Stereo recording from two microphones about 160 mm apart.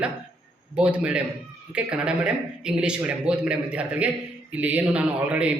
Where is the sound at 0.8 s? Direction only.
5° right (ahead or behind).